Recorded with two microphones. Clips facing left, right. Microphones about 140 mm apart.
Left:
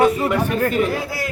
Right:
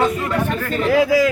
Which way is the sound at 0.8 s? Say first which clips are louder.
Right 9 dB; 90° right.